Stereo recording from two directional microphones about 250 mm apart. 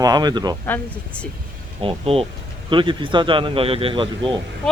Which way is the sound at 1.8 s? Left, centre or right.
Right.